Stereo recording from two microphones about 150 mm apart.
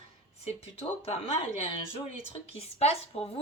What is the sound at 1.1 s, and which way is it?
Speech, 40° left (ahead or behind).